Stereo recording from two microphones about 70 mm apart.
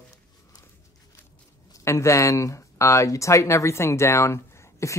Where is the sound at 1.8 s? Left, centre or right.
Left.